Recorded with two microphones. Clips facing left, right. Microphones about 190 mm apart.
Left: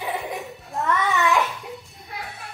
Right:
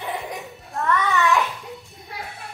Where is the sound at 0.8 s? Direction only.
20° left (ahead or behind).